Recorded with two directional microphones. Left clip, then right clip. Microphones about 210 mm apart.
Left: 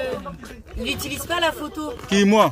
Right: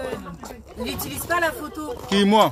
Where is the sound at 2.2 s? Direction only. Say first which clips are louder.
Even; 15° left (ahead or behind).